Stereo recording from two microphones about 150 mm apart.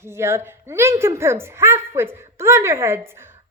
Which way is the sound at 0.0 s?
15° right (ahead or behind).